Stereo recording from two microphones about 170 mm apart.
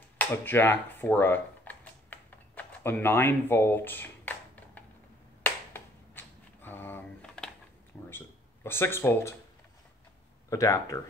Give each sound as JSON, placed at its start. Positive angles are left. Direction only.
{"t": 0.2, "sound": "a sound", "side_deg": 10}
{"t": 5.4, "sound": "finger snapping", "side_deg": 10}
{"t": 8.6, "sound": "speech", "side_deg": 15}
{"t": 10.5, "sound": "speech", "side_deg": 20}